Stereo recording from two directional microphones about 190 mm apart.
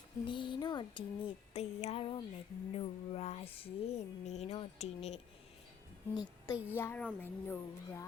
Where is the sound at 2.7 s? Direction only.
35° left (ahead or behind).